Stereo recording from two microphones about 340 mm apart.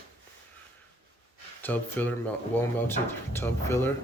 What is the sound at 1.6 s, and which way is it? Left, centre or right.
Speech, centre.